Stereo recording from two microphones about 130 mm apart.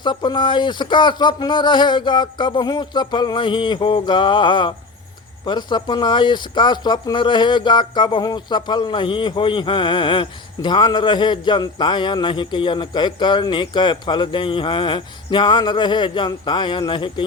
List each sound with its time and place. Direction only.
0.0 s speech: 35° left (ahead or behind)